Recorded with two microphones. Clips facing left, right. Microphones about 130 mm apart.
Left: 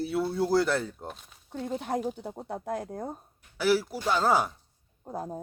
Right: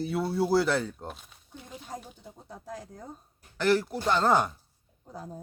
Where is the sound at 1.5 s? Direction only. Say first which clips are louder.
Left 11 dB; 70° left (ahead or behind).